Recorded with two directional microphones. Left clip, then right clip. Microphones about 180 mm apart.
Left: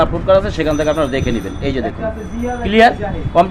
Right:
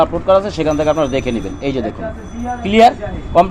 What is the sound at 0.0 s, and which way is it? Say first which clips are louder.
Speech: even; 15° right (ahead or behind).